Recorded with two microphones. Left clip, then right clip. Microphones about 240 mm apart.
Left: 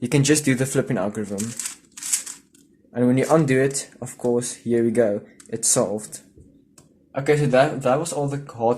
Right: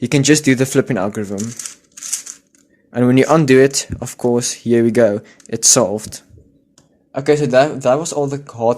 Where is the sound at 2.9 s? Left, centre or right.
Right.